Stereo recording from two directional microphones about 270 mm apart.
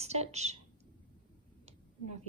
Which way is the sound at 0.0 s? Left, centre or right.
Right.